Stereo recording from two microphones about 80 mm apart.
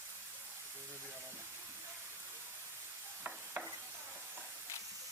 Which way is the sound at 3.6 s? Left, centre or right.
Right.